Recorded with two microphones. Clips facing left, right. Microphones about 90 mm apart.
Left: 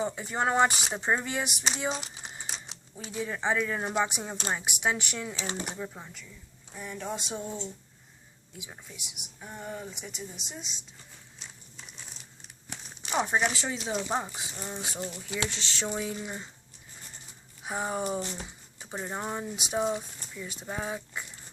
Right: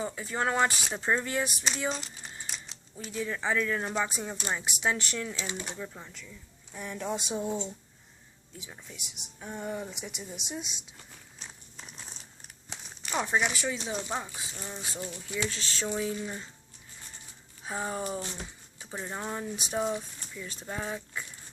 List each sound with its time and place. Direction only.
0.0 s speech: 25° left (ahead or behind)
6.7 s speech: centre (ahead or behind)
8.5 s speech: 15° left (ahead or behind)
9.0 s speech: centre (ahead or behind)
11.3 s a sound: 40° right (ahead or behind)
13.0 s crumpling: 20° left (ahead or behind)
13.5 s speech: 25° left (ahead or behind)
15.0 s speech: 80° left
15.4 s speech: 20° left (ahead or behind)
17.6 s speech: 15° left (ahead or behind)